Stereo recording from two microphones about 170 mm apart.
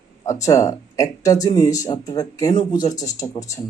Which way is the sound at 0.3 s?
20° left (ahead or behind).